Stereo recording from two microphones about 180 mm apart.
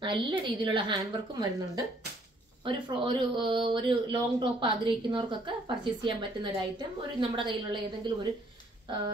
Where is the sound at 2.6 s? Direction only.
30° right (ahead or behind).